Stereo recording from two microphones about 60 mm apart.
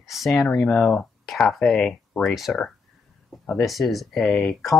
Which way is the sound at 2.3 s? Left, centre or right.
Centre.